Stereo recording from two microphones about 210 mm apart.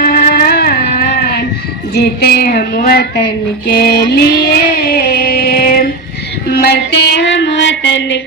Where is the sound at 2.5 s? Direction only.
45° left (ahead or behind).